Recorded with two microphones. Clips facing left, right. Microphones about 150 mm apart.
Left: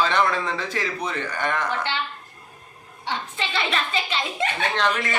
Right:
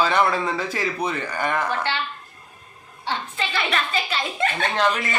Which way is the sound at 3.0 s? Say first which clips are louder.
Right 1 dB; 20° left (ahead or behind).